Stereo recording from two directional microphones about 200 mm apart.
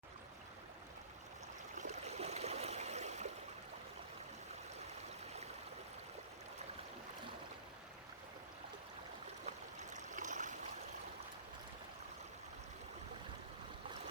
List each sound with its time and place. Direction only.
1.7 s stream: 35° right (ahead or behind)
9.9 s stream: 35° right (ahead or behind)